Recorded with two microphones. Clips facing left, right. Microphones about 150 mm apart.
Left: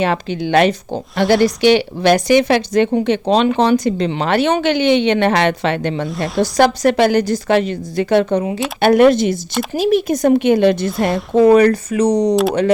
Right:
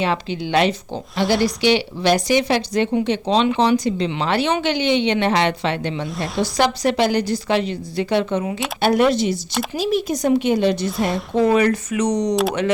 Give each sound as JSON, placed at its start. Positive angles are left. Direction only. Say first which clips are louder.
{"t": 0.0, "sound": "speech", "louder": "left 4 dB", "side_deg": 50}
{"t": 6.1, "sound": "a woman's voice", "louder": "left 5 dB", "side_deg": 0}
{"t": 6.4, "sound": "a woman's voice", "louder": "left 6 dB", "side_deg": 50}
{"t": 10.8, "sound": "a woman's voice", "louder": "left 4 dB", "side_deg": 0}
{"t": 11.3, "sound": "speech", "louder": "left 7 dB", "side_deg": 40}